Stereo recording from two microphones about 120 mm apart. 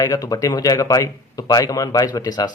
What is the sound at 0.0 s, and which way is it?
Speech, 30° left (ahead or behind).